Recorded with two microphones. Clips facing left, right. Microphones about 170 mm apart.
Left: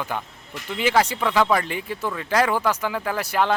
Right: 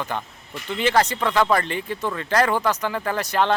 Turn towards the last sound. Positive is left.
turn(degrees=10)  # may be behind; listen again after turning